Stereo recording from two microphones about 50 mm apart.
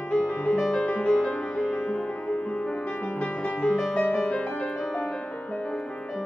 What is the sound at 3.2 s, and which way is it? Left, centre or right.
Music, left.